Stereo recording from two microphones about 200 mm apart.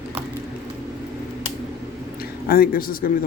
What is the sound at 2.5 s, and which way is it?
Speech, 45° left (ahead or behind).